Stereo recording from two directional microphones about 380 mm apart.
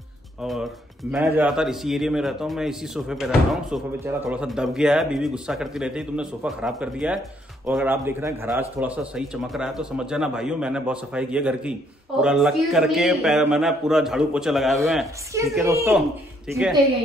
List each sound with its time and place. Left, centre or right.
0.4 s a man's voice: centre